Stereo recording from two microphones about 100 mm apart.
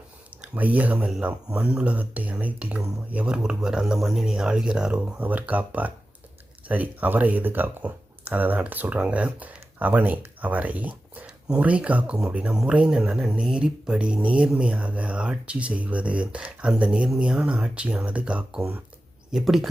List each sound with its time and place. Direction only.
0.5 s speech: 15° right (ahead or behind)